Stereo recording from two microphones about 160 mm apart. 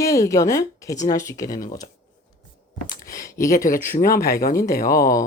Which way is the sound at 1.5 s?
60° left (ahead or behind).